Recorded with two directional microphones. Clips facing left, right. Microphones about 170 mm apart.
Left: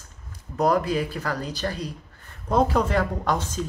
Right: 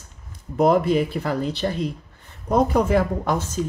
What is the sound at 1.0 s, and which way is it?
Speech, 15° right (ahead or behind).